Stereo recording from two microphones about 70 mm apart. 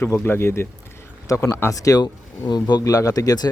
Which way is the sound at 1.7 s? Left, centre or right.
Left.